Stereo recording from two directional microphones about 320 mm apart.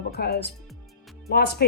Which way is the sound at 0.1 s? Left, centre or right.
Left.